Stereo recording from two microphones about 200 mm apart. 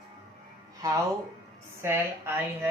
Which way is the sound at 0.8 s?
15° right (ahead or behind).